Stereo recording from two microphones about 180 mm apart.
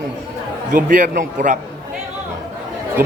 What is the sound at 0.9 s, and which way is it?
Speech, 45° right (ahead or behind).